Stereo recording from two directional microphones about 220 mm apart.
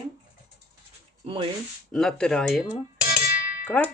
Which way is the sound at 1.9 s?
Centre (ahead or behind).